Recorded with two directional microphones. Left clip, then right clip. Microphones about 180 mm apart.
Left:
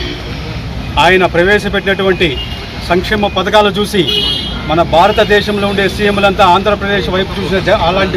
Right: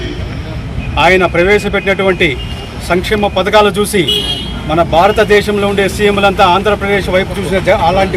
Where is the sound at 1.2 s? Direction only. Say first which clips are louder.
Even; 15° right (ahead or behind).